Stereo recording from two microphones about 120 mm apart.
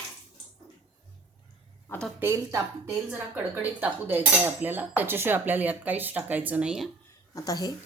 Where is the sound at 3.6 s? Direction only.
15° right (ahead or behind).